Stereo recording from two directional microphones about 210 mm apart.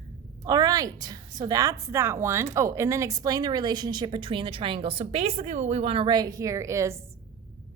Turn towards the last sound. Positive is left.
turn(degrees=-15)  # may be behind; listen again after turning